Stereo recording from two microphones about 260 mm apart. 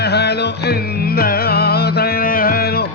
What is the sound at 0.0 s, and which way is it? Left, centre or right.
Music, left.